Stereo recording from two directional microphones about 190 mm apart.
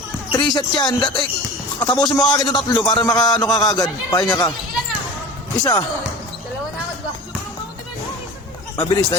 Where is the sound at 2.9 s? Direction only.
25° left (ahead or behind).